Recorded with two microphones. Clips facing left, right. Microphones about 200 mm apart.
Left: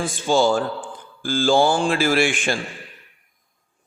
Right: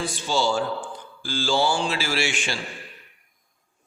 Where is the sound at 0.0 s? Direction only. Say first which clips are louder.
Left 6 dB; 50° left (ahead or behind).